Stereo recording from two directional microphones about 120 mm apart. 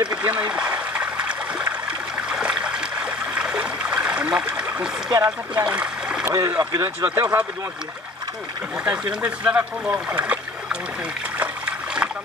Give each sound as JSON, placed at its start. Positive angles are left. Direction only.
{"t": 0.1, "sound": "stream", "side_deg": -10}
{"t": 5.1, "sound": "speech", "side_deg": -35}
{"t": 5.6, "sound": "splash", "side_deg": -10}
{"t": 6.2, "sound": "speech", "side_deg": -30}
{"t": 8.8, "sound": "speech", "side_deg": -10}
{"t": 11.3, "sound": "trickle", "side_deg": -10}